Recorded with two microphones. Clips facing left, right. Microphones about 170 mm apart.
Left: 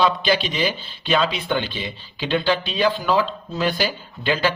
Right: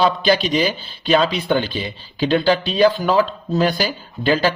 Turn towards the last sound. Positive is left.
turn(degrees=-40)  # may be behind; listen again after turning